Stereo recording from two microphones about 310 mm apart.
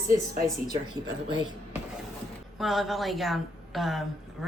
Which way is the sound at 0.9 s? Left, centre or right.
Left.